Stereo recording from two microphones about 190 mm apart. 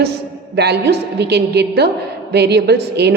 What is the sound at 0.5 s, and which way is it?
A woman's voice, 60° right (ahead or behind).